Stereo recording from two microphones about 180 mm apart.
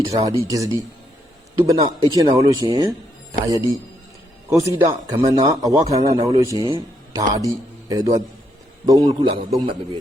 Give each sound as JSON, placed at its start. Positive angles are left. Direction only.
{"t": 0.0, "sound": "a man's voice", "side_deg": -20}